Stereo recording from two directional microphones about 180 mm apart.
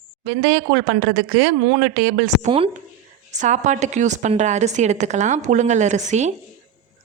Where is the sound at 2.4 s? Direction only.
30° right (ahead or behind).